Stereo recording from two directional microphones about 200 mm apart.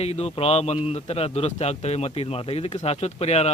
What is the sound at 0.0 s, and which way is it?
A man's voice, 30° left (ahead or behind).